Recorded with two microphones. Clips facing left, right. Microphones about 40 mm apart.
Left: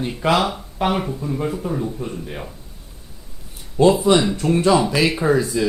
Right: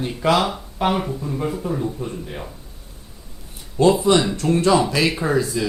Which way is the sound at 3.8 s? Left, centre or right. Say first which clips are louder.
Left 1 dB; centre.